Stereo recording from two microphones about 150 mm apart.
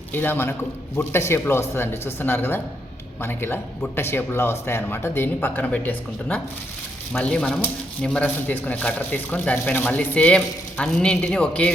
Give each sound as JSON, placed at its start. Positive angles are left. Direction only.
{"t": 0.1, "sound": "speech", "side_deg": 15}